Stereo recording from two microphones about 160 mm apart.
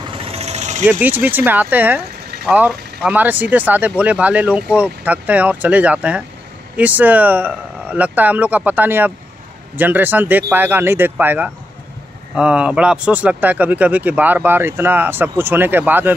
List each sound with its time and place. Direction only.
0.1 s vehicle: 35° right (ahead or behind)
0.8 s speech: 10° right (ahead or behind)